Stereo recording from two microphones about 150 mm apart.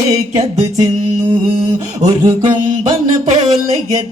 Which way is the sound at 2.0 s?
25° right (ahead or behind).